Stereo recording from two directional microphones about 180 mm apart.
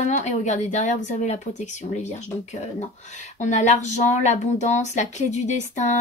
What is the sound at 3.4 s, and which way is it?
Speech, 40° left (ahead or behind).